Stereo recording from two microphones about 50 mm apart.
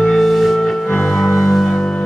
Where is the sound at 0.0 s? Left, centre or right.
Centre.